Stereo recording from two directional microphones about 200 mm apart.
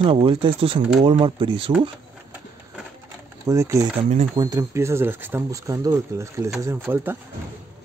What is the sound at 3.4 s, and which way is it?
Speech, 15° right (ahead or behind).